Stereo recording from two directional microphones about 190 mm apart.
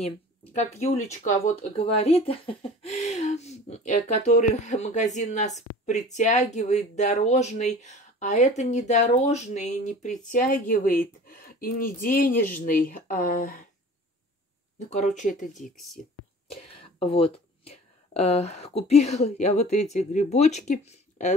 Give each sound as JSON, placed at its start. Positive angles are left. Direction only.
{"t": 0.5, "sound": "speech", "side_deg": 35}
{"t": 14.9, "sound": "speech", "side_deg": 40}
{"t": 15.6, "sound": "speech", "side_deg": 0}
{"t": 16.6, "sound": "speech", "side_deg": 30}